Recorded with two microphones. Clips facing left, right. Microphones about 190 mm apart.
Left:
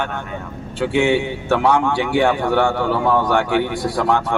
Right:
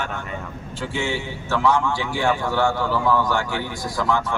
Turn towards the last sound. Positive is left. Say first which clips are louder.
# left 5 dB
turn(degrees=60)  # may be behind; listen again after turning